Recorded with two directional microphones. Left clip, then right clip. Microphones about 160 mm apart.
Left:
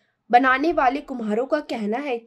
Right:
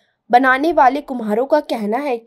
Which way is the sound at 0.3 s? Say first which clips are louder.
Right 4 dB; 25° right (ahead or behind).